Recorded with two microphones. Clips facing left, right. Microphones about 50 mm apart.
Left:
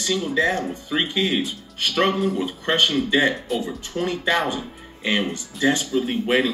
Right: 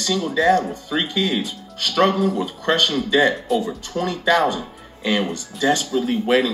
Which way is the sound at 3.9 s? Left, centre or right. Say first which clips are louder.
Right 3 dB; left.